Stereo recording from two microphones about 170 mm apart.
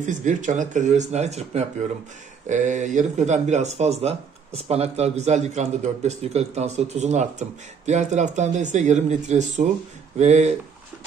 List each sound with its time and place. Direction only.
0.0 s speech: 45° right (ahead or behind)